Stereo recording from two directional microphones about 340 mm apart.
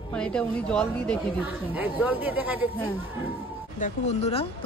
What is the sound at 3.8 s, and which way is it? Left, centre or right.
Speech, centre.